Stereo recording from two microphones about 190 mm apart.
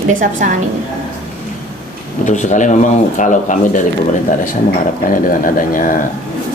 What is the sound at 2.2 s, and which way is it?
Speech, 40° left (ahead or behind).